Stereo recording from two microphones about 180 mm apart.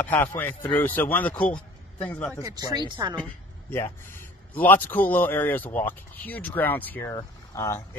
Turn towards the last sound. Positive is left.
turn(degrees=15)  # may be behind; listen again after turning